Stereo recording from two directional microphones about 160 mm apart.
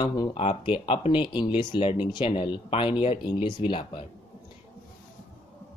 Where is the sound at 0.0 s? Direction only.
25° left (ahead or behind).